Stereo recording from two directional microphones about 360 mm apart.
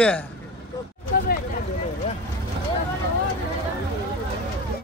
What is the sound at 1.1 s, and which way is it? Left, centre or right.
Hubbub, left.